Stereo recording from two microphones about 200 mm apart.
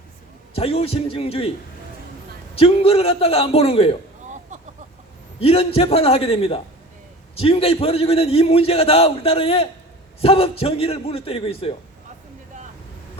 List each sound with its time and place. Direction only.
0.5 s a man's voice: 30° left (ahead or behind)
2.6 s a man's voice: 30° left (ahead or behind)
5.4 s a man's voice: 30° left (ahead or behind)